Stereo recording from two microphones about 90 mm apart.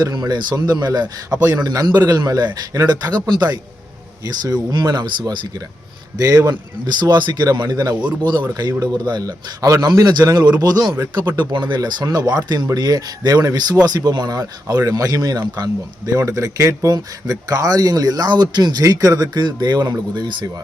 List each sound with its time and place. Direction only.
0.0 s speech: 50° right (ahead or behind)